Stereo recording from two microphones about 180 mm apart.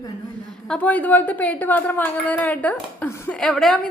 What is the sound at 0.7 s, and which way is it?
A woman's voice, 10° left (ahead or behind).